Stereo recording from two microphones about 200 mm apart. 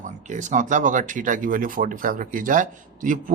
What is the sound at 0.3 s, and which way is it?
Speech, 40° right (ahead or behind).